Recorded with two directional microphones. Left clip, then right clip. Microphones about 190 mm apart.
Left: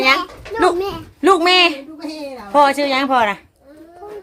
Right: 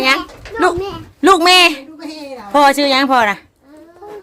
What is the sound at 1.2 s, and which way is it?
Speech, 25° right (ahead or behind).